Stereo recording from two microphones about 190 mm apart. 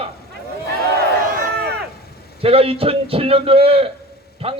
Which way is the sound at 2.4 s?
30° right (ahead or behind).